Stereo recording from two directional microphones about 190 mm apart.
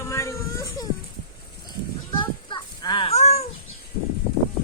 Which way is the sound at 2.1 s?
25° left (ahead or behind).